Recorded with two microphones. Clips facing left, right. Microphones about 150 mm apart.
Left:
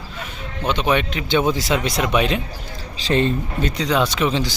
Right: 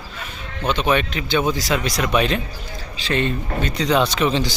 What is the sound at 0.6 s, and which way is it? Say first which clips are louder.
A man's voice: even; 20° left (ahead or behind).